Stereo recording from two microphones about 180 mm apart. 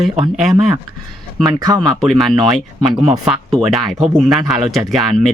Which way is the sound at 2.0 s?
Centre (ahead or behind).